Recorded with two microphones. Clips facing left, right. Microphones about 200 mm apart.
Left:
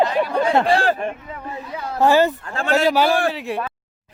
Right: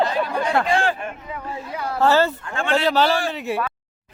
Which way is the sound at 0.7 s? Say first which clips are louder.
Left 3 dB; 35° left (ahead or behind).